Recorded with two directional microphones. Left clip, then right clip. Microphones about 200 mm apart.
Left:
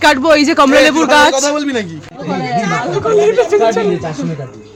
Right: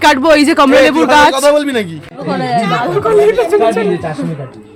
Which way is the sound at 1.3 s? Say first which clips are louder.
Right 4 dB; 35° right (ahead or behind).